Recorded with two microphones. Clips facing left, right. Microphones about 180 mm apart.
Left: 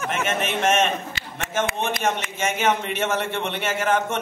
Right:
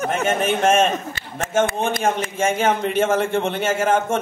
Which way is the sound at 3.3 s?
50° right (ahead or behind).